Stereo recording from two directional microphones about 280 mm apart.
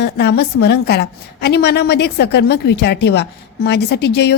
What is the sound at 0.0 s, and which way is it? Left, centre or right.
A woman's voice, left.